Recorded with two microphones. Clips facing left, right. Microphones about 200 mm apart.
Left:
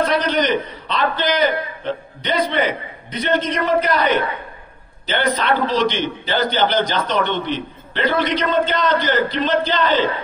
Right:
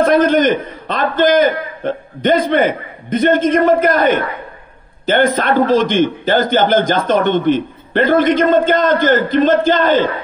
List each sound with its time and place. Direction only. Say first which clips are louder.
0.0 s a man's voice: right 7 dB; 50° right (ahead or behind)